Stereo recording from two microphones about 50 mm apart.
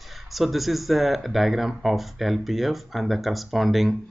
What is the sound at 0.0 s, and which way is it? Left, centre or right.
Speech, centre.